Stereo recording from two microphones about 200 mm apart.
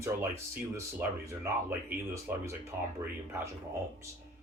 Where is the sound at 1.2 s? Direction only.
15° right (ahead or behind).